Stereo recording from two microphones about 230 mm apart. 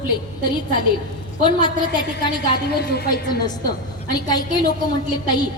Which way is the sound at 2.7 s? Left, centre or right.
Left.